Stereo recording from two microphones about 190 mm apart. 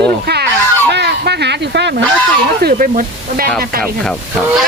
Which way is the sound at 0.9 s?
60° right (ahead or behind).